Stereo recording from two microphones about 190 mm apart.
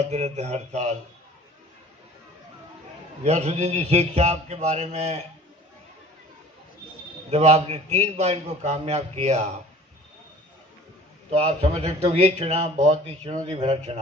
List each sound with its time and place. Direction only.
0.0 s a man's voice: 35° right (ahead or behind)
3.3 s a man's voice: 35° right (ahead or behind)
7.2 s a man's voice: 30° right (ahead or behind)
11.3 s a man's voice: 35° right (ahead or behind)